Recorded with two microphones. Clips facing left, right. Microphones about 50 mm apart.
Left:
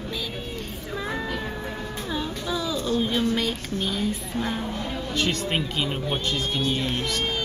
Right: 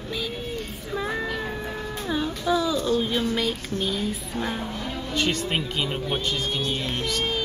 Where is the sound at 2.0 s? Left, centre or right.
Centre.